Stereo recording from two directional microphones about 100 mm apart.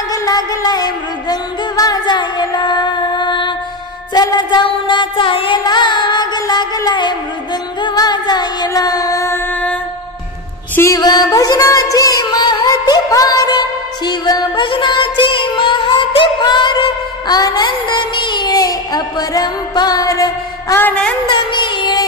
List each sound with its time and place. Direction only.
0.1 s music: 40° left (ahead or behind)
9.3 s music: 15° left (ahead or behind)
11.0 s music: 40° left (ahead or behind)
17.6 s music: 55° left (ahead or behind)
18.6 s music: 40° left (ahead or behind)
20.8 s a sound: 15° left (ahead or behind)
21.3 s music: 50° left (ahead or behind)